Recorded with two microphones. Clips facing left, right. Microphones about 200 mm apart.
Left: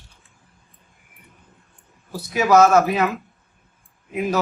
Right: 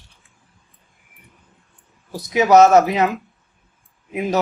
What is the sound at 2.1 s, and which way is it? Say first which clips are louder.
Speech: right 3 dB; 20° right (ahead or behind).